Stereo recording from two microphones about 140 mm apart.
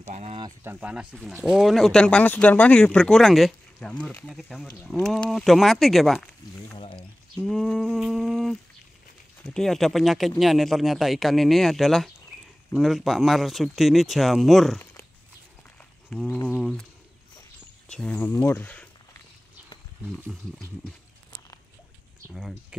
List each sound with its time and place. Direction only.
0.0 s a sound: 55° right (ahead or behind)
0.7 s speech: 10° right (ahead or behind); by 4.3 s 10° left (ahead or behind)
4.3 s speech: centre (ahead or behind)
6.8 s a sound: 40° left (ahead or behind)
7.4 s speech: 5° left (ahead or behind)
16.1 s speech: 5° left (ahead or behind)
17.8 s speech: 5° left (ahead or behind)
20.1 s speech: 5° left (ahead or behind)